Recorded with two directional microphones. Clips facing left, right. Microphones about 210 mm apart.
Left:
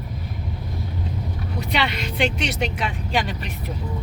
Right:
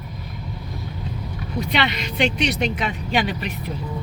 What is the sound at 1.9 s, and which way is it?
Speech, 5° left (ahead or behind).